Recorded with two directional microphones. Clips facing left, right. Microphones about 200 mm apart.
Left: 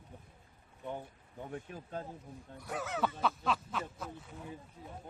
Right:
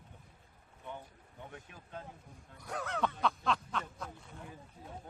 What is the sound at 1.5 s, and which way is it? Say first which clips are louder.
Speech: left 9 dB; 35° left (ahead or behind).